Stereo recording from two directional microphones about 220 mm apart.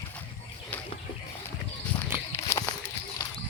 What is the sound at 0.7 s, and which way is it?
Bird, 5° left (ahead or behind).